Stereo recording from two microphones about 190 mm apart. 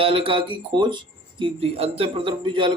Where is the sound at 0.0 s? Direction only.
30° right (ahead or behind).